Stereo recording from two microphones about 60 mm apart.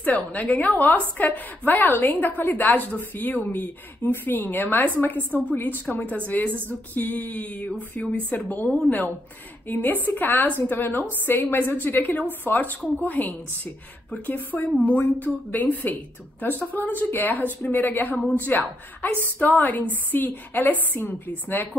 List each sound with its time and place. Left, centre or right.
0.0 s a woman's voice: left
8.6 s a woman's voice: centre
9.7 s a woman's voice: left